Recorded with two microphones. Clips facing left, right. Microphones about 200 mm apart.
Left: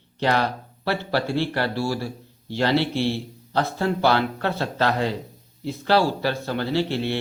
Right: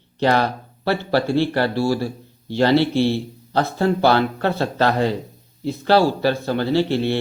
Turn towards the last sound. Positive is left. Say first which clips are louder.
# right 5 dB
turn(degrees=-35)  # may be behind; listen again after turning